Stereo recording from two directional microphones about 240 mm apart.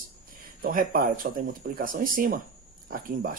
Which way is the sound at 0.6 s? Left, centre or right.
Right.